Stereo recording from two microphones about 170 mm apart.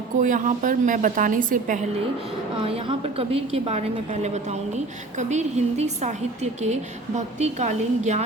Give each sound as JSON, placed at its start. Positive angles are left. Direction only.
{"t": 0.2, "sound": "a woman's voice", "side_deg": -50}
{"t": 2.6, "sound": "a woman's voice", "side_deg": -35}